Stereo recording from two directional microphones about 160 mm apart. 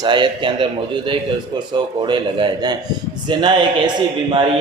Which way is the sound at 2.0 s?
30° right (ahead or behind).